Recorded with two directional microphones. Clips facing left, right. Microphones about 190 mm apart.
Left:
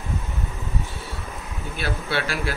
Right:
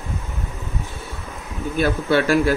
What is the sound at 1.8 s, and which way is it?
Speech, 45° right (ahead or behind).